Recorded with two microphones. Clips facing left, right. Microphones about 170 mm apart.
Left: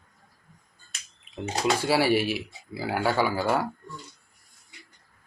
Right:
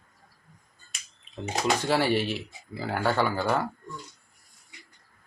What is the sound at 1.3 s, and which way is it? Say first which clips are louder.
Speech: left 1 dB; 10° left (ahead or behind).